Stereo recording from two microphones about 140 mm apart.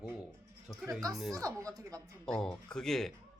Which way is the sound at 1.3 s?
25° right (ahead or behind).